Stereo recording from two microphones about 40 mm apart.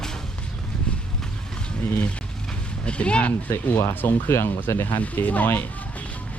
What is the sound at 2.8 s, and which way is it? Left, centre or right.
Speech, left.